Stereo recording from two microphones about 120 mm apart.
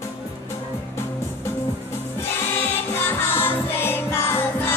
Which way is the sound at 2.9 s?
20° left (ahead or behind).